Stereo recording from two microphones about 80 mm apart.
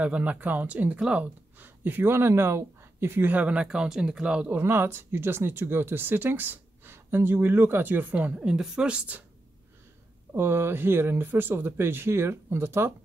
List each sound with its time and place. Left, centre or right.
0.0 s speech: centre
4.5 s speech: right
10.3 s speech: right